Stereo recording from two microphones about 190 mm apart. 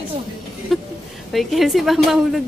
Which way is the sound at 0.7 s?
Centre (ahead or behind).